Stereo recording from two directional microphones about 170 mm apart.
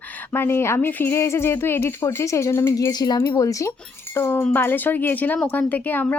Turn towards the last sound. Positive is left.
turn(degrees=10)  # may be behind; listen again after turning